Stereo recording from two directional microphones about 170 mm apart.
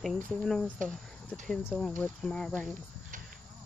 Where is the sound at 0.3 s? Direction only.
Centre (ahead or behind).